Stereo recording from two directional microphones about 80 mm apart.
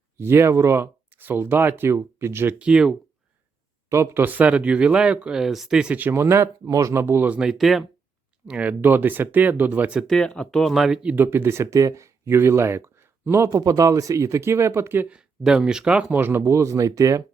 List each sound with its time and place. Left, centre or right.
0.2 s speech: right
2.6 s speech: centre
3.8 s speech: right; by 6.0 s centre
6.0 s speech: right
7.3 s speech: centre
8.4 s speech: centre
10.2 s speech: centre
11.1 s speech: right
13.5 s speech: right
15.1 s speech: centre
16.1 s speech: right